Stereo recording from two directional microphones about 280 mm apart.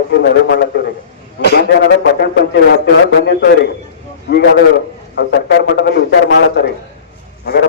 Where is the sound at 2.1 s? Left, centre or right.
Left.